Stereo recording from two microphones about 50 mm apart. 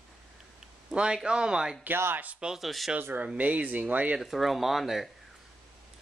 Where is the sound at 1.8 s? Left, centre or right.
Right.